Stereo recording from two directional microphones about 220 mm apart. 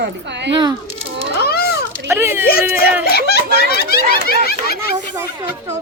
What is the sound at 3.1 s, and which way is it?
Speech, 45° left (ahead or behind).